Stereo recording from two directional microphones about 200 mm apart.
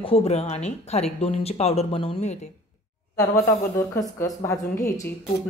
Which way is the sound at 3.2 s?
15° left (ahead or behind).